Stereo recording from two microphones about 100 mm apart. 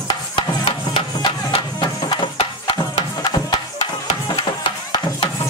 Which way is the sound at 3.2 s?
40° left (ahead or behind).